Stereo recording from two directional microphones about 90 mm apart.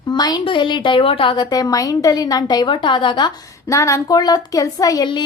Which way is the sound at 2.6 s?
65° left (ahead or behind).